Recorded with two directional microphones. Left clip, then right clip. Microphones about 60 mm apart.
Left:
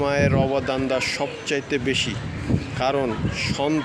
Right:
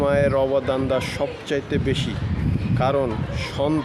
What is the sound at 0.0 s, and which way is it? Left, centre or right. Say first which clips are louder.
Speech: right 2 dB; right.